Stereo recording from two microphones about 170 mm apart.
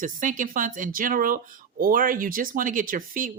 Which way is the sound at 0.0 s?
50° right (ahead or behind).